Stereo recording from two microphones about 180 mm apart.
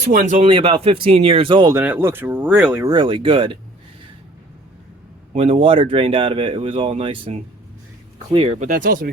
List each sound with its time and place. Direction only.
0.0 s speech: 40° right (ahead or behind); by 1.7 s 25° right (ahead or behind)
1.7 s speech: 10° right (ahead or behind)
2.9 s speech: 25° right (ahead or behind)
5.4 s speech: 30° right (ahead or behind); by 9.1 s 50° right (ahead or behind)